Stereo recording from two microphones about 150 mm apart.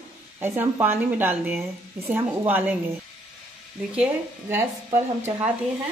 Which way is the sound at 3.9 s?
15° right (ahead or behind).